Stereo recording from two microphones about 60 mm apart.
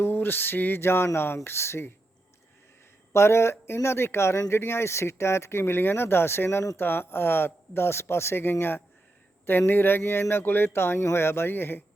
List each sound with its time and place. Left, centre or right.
0.0 s speech: left
3.1 s speech: left